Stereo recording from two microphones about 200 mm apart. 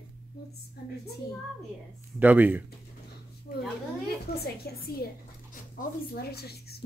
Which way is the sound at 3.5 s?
45° left (ahead or behind).